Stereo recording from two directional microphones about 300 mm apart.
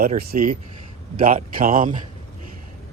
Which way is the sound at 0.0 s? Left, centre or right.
Right.